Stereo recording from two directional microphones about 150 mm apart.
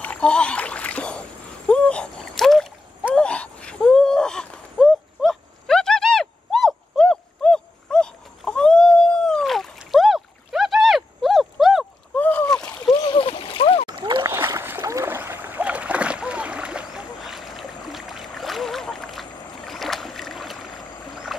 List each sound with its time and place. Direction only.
0.0 s speech: 5° left (ahead or behind)
1.7 s boat: 5° left (ahead or behind)
3.2 s gasp: 5° left (ahead or behind)
12.2 s splash: 10° left (ahead or behind)
12.9 s splash: 35° left (ahead or behind)
13.8 s splash: 30° right (ahead or behind)
14.2 s splash: 20° right (ahead or behind); by 20.5 s centre (ahead or behind)
21.3 s music: centre (ahead or behind)